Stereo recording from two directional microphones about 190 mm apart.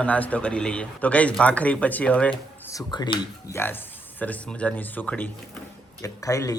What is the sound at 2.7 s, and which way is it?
Speech, 20° left (ahead or behind).